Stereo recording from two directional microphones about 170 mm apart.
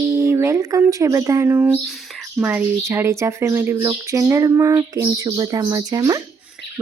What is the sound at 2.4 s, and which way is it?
Speech, 10° right (ahead or behind).